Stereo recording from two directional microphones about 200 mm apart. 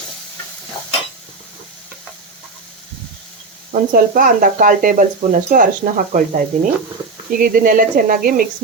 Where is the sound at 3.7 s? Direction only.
45° right (ahead or behind).